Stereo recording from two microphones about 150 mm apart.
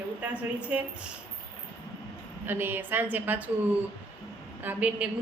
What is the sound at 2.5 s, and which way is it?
A woman's voice, 15° right (ahead or behind).